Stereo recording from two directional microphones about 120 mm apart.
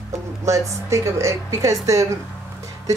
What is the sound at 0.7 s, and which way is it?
Speech, 25° right (ahead or behind).